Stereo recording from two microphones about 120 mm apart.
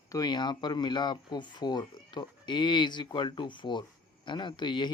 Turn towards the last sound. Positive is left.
turn(degrees=40)  # may be behind; listen again after turning